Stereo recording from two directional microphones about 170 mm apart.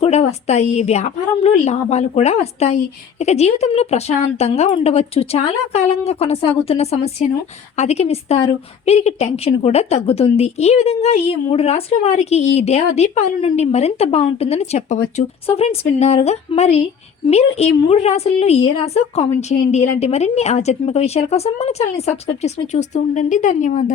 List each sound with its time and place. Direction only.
0.0 s a woman's voice: 40° left (ahead or behind)